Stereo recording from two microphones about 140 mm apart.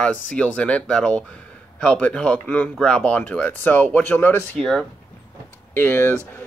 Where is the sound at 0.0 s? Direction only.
10° left (ahead or behind).